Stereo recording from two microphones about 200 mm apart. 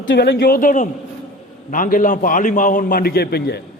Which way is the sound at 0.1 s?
55° left (ahead or behind).